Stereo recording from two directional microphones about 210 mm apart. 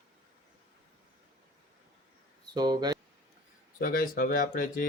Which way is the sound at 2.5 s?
20° right (ahead or behind).